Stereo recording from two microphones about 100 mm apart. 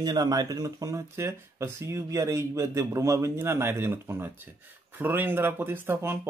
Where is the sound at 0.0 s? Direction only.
40° right (ahead or behind).